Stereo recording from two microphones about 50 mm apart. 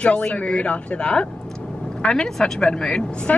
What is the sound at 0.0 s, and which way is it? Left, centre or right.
Speech, left.